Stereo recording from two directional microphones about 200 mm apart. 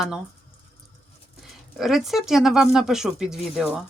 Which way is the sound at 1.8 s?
Centre (ahead or behind).